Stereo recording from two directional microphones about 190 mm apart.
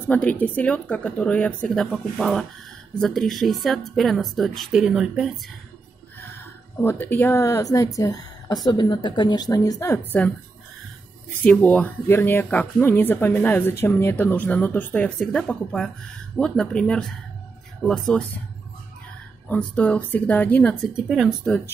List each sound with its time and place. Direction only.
0.1 s a woman's voice: 10° left (ahead or behind)
6.8 s a woman's voice: 10° left (ahead or behind)
11.4 s a woman's voice: 10° left (ahead or behind)
19.5 s speech: 10° left (ahead or behind)
20.9 s a woman's voice: centre (ahead or behind)